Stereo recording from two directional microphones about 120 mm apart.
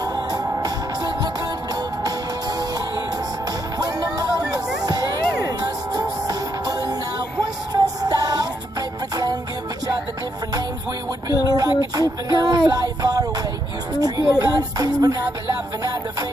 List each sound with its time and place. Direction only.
0.0 s music: 30° right (ahead or behind)
3.7 s music: 30° right (ahead or behind)
11.2 s a sound: 30° right (ahead or behind)
15.8 s music: 30° right (ahead or behind)